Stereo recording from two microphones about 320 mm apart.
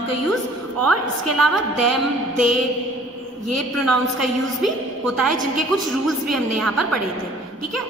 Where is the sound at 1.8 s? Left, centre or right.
Right.